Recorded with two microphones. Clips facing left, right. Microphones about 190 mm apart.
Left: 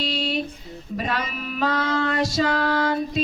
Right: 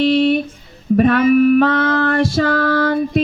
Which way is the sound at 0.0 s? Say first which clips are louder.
Right 12 dB; 55° right (ahead or behind).